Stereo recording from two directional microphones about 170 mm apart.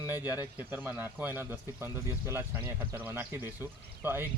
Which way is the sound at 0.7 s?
10° right (ahead or behind).